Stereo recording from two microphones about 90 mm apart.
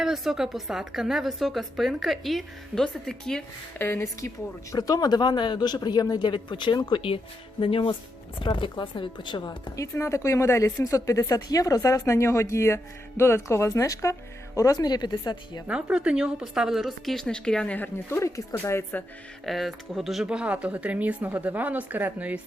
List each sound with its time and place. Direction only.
0.0 s a woman's voice: 5° right (ahead or behind)
3.8 s speech: 25° left (ahead or behind)
4.7 s speech: 45° left (ahead or behind); by 7.2 s 65° left (ahead or behind)
7.6 s speech: 75° left (ahead or behind)
8.4 s a woman's voice: 65° left (ahead or behind)
15.6 s a woman's voice: 10° right (ahead or behind); by 17.7 s 10° left (ahead or behind)
17.7 s speech: 25° left (ahead or behind)
19.5 s speech: centre (ahead or behind); by 22.4 s 20° right (ahead or behind)